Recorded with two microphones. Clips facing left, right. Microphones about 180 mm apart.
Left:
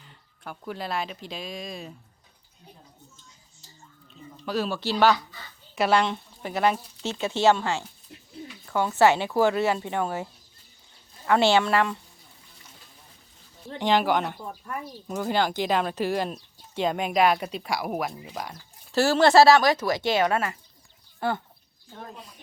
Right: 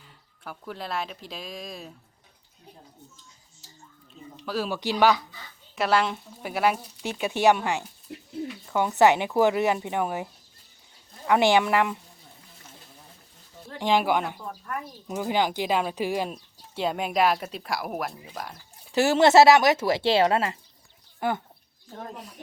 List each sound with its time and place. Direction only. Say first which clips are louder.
0.0 s speech: left 1 dB; centre (ahead or behind)
4.4 s speech: left 1 dB; 5° right (ahead or behind)
5.7 s speech: left 1 dB; centre (ahead or behind); by 10.2 s 15° right (ahead or behind)
11.3 s speech: even; 15° right (ahead or behind)
13.7 s speech: even; 5° right (ahead or behind)
18.9 s speech: right 1 dB; 20° right (ahead or behind)